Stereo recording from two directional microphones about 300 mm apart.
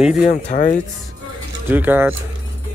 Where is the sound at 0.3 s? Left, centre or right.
Left.